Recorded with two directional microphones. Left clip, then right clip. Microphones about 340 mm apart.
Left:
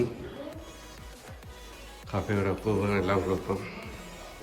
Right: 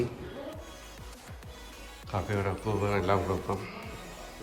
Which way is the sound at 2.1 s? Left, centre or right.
Centre.